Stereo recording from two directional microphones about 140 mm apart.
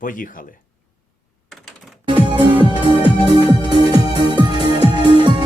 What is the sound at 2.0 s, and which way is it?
Music, 35° right (ahead or behind).